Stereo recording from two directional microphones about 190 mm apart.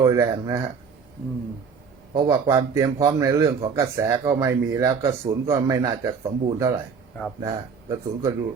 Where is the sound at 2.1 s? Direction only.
25° right (ahead or behind).